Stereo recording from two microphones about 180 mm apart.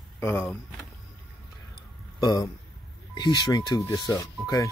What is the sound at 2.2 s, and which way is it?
Speech, 20° left (ahead or behind).